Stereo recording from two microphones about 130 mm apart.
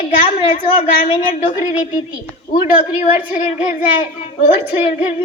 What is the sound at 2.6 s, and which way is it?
A woman's voice, 15° right (ahead or behind).